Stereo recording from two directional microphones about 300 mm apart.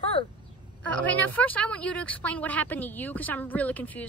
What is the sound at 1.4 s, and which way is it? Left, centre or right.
Speech, centre.